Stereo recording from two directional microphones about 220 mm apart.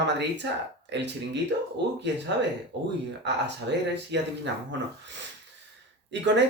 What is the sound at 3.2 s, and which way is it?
Speech, 50° right (ahead or behind).